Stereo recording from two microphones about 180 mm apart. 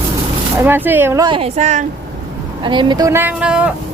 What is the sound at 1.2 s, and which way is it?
Speech, 30° right (ahead or behind).